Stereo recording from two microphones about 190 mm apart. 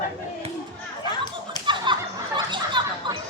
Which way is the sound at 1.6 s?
25° right (ahead or behind).